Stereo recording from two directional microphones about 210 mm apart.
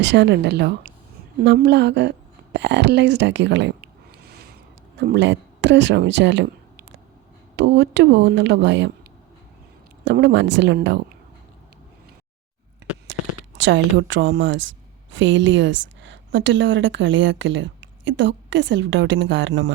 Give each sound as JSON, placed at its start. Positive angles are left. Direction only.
{"t": 0.0, "sound": "a woman's voice", "side_deg": -55}
{"t": 10.0, "sound": "a woman's voice", "side_deg": -60}
{"t": 13.1, "sound": "a sound", "side_deg": -60}
{"t": 13.6, "sound": "a woman's voice", "side_deg": -60}